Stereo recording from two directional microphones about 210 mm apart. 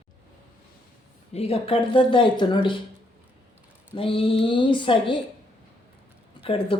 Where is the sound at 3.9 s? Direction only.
25° left (ahead or behind).